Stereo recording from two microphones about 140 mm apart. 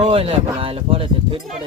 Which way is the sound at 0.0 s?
40° right (ahead or behind).